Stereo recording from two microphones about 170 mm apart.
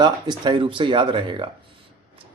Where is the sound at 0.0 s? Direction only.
25° right (ahead or behind).